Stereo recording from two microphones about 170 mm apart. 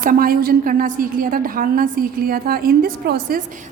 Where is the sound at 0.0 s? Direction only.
55° right (ahead or behind).